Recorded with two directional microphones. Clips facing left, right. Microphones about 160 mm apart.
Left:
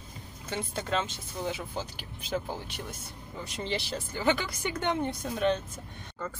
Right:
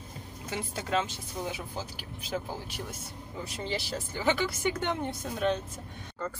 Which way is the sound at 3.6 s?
5° right (ahead or behind).